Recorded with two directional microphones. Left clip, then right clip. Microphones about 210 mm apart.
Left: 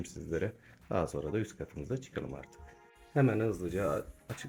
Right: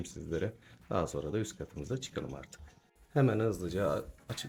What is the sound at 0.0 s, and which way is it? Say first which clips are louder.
Speech: left 1 dB; centre (ahead or behind).